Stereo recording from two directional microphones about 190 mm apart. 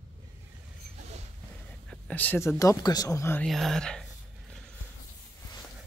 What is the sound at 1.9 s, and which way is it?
Speech, 10° left (ahead or behind).